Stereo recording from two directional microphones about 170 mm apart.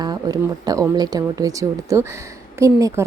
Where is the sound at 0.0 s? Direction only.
25° right (ahead or behind).